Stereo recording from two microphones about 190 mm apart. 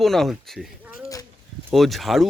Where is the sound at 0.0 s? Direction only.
Centre (ahead or behind).